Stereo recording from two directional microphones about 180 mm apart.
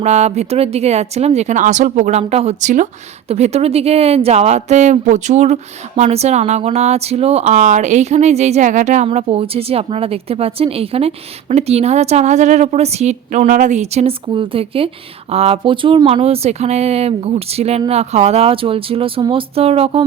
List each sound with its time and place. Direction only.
0.0 s a woman's voice: 40° right (ahead or behind)
9.0 s a woman's voice: 30° right (ahead or behind)